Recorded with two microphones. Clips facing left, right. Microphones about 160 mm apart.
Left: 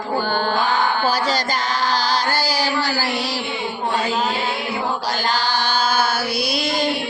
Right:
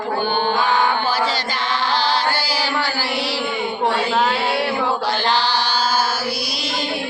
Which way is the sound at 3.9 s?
80° right.